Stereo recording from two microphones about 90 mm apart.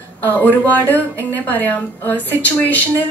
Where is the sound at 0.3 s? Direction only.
20° left (ahead or behind).